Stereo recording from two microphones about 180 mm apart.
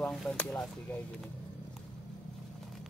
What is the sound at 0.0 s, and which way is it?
Speech, centre (ahead or behind).